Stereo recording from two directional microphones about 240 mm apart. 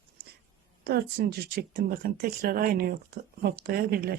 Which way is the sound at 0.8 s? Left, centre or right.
Right.